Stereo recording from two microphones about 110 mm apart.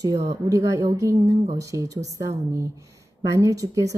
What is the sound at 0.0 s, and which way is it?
A woman's voice, 35° right (ahead or behind).